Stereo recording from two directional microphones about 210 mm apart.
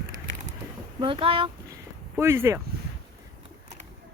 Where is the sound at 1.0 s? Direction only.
25° right (ahead or behind).